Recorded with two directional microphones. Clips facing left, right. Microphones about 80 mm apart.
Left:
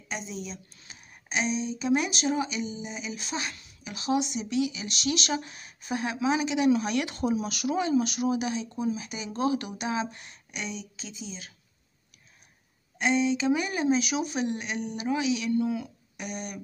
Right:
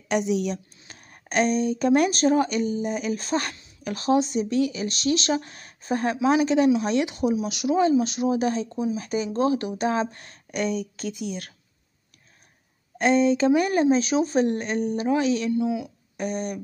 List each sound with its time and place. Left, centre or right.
0.1 s speech: right
0.8 s speech: right
6.8 s speech: right
12.9 s speech: right
15.5 s speech: centre
16.2 s speech: right